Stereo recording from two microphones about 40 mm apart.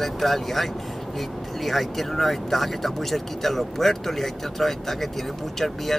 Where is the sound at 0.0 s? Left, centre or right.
Centre.